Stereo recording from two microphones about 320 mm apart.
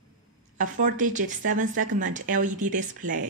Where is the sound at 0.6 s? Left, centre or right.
Right.